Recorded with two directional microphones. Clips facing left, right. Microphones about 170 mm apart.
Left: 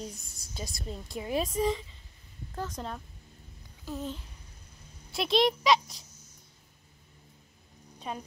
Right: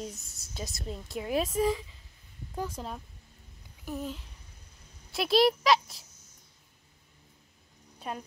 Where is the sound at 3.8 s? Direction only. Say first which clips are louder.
Even; 10° right (ahead or behind).